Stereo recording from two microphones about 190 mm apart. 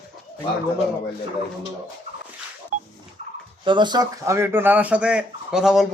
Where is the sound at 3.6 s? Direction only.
25° right (ahead or behind).